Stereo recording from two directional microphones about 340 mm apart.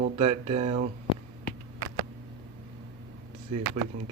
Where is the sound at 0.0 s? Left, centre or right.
Centre.